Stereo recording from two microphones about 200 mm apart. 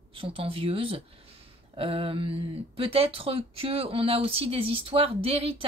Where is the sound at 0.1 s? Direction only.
25° right (ahead or behind).